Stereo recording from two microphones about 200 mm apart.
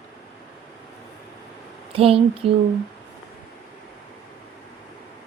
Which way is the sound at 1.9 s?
30° right (ahead or behind).